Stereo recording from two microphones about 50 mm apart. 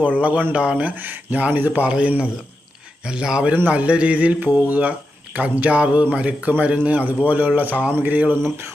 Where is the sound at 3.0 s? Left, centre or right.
Centre; by 8.4 s right.